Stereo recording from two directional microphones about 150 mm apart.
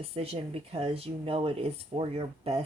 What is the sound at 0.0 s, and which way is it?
Speech, 40° right (ahead or behind).